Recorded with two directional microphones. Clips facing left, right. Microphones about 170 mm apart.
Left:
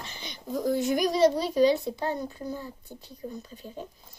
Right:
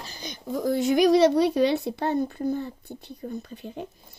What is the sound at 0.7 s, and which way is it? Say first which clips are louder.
A woman's voice: right 8 dB; 70° right (ahead or behind).